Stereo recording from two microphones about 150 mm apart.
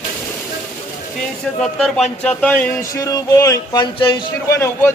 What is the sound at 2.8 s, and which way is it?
A man's voice, 25° left (ahead or behind).